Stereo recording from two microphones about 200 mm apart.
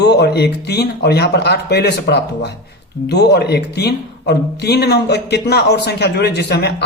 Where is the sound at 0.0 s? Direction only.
55° left (ahead or behind).